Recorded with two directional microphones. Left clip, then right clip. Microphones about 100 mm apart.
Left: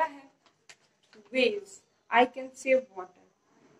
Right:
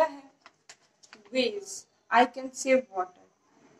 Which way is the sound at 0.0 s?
30° right (ahead or behind).